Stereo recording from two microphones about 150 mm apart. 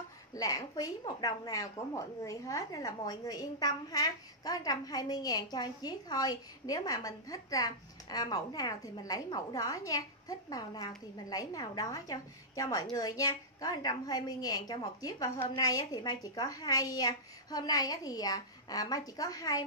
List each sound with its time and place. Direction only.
0.3 s a woman's voice: 25° left (ahead or behind)
15.4 s a woman's voice: 35° left (ahead or behind)